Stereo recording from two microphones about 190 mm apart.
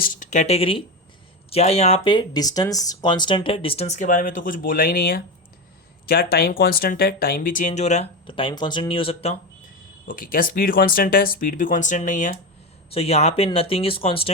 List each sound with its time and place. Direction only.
0.0 s speech: 45° left (ahead or behind); by 9.3 s 30° left (ahead or behind)
10.1 s speech: 50° left (ahead or behind)
12.9 s speech: 30° left (ahead or behind)